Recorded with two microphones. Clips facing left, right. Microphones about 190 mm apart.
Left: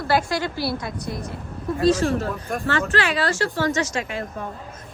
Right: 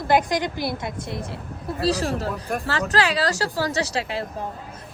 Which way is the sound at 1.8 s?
35° right (ahead or behind).